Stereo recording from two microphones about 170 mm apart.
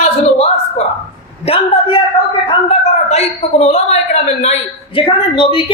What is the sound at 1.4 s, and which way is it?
Speech, 35° left (ahead or behind).